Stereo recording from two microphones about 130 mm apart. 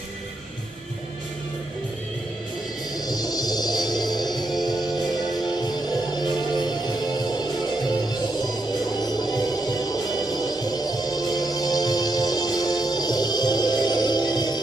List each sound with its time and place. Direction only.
3.1 s music: 30° left (ahead or behind)